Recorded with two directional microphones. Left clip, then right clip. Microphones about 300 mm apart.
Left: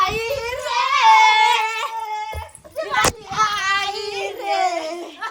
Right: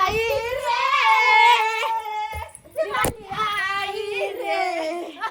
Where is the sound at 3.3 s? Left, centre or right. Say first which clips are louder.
Left 5 dB; centre.